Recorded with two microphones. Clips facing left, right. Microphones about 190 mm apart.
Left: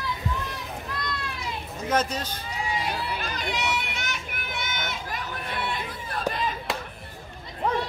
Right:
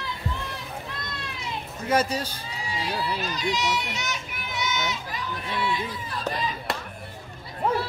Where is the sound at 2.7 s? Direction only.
55° left (ahead or behind).